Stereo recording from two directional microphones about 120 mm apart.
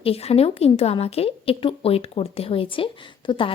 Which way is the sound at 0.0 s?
55° left (ahead or behind).